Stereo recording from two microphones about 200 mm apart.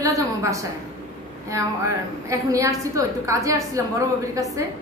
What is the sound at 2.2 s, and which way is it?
A woman's voice, 15° right (ahead or behind).